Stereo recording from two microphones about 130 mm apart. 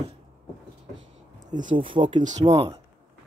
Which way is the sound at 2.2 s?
55° right (ahead or behind).